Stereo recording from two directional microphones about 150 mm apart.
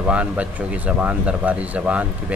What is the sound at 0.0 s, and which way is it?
Speech, 10° right (ahead or behind).